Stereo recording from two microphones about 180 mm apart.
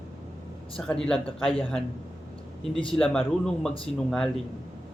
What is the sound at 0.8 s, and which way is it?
Speech, 5° left (ahead or behind).